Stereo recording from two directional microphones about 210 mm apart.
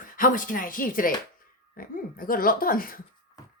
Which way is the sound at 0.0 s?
40° left (ahead or behind).